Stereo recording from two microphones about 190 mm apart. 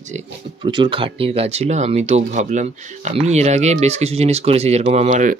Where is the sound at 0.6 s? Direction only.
25° right (ahead or behind).